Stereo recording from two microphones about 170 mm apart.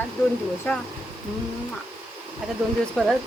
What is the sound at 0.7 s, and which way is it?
Speech, 10° left (ahead or behind).